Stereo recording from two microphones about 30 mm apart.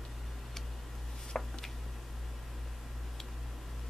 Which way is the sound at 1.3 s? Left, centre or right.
Left.